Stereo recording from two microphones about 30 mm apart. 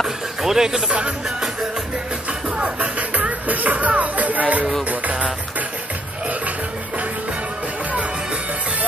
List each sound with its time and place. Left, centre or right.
0.4 s speech: centre
2.6 s music: right